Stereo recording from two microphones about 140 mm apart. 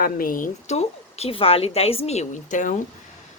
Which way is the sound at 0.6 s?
50° left (ahead or behind).